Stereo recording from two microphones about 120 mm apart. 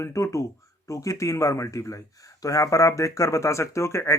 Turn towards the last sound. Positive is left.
turn(degrees=25)  # may be behind; listen again after turning